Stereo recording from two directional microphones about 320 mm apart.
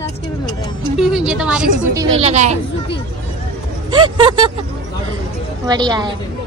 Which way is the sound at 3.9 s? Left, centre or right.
Centre.